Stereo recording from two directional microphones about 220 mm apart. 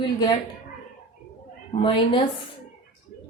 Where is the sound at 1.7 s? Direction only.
25° left (ahead or behind).